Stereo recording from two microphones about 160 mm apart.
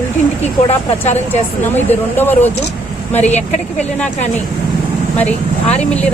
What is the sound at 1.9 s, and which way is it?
Speech, 15° left (ahead or behind).